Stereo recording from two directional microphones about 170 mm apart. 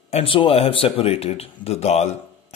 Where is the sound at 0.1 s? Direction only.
35° left (ahead or behind).